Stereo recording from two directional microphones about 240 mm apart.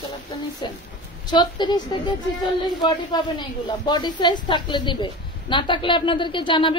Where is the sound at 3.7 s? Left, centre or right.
Centre.